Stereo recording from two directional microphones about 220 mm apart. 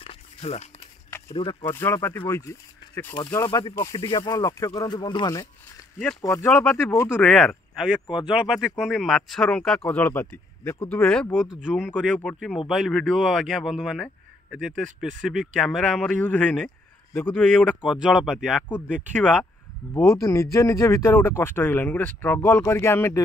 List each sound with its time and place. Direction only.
0.0 s crumpling: 25° left (ahead or behind)
1.3 s speech: 20° left (ahead or behind)
3.4 s speech: 20° left (ahead or behind)